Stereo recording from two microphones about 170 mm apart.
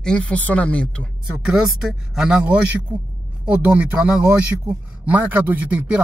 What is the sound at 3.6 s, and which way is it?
A man's voice, 5° right (ahead or behind).